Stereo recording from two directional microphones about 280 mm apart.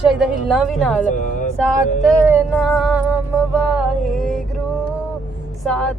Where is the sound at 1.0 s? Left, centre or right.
Left.